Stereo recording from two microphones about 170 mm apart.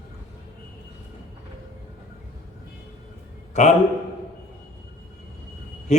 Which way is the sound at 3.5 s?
45° left (ahead or behind).